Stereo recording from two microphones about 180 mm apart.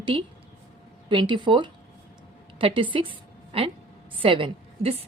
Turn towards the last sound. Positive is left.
turn(degrees=-30)  # may be behind; listen again after turning